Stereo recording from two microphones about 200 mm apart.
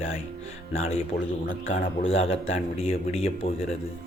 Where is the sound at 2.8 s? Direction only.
30° left (ahead or behind).